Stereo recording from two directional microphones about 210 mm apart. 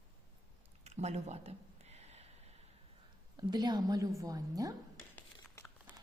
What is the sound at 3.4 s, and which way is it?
A woman's voice, 20° right (ahead or behind).